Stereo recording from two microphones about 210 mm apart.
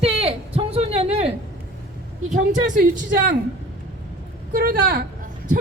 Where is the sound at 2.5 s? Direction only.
40° right (ahead or behind).